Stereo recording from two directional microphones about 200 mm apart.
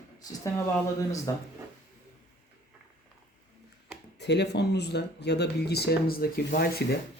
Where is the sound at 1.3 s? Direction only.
15° left (ahead or behind).